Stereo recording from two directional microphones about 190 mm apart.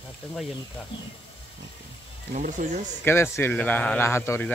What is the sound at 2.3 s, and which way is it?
Speech, 45° right (ahead or behind).